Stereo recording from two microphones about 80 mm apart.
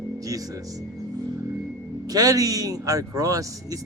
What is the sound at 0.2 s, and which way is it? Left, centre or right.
Speech, right.